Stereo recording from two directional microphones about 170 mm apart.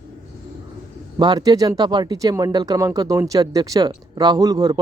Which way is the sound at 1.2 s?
25° right (ahead or behind).